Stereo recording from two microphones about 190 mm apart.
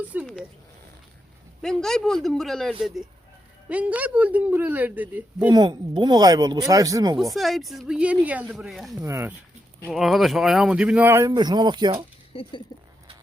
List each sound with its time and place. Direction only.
0.1 s a sound: 10° right (ahead or behind)
1.6 s speech: centre (ahead or behind)
5.5 s speech: 20° right (ahead or behind)
7.3 s speech: centre (ahead or behind)
9.0 s speech: 15° right (ahead or behind)
9.8 s speech: centre (ahead or behind); by 12.0 s 25° right (ahead or behind)
12.3 s speech: 25° left (ahead or behind)